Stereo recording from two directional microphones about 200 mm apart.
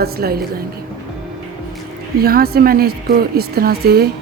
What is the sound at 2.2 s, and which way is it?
A woman's voice, 50° right (ahead or behind).